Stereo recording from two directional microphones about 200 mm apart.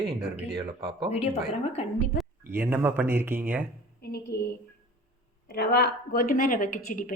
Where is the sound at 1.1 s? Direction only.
30° left (ahead or behind).